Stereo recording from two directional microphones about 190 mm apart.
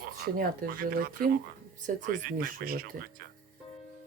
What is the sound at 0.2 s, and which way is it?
Speech, 50° right (ahead or behind).